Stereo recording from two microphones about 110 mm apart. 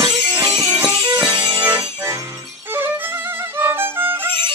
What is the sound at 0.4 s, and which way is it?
Music, 10° right (ahead or behind).